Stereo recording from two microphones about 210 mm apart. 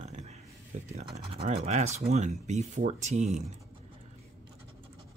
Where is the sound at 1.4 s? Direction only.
30° right (ahead or behind).